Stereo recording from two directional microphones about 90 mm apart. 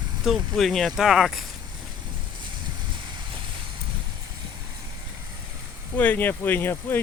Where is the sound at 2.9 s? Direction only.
60° right (ahead or behind).